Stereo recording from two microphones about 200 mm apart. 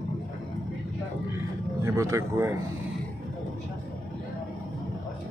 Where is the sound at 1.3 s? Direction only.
15° right (ahead or behind).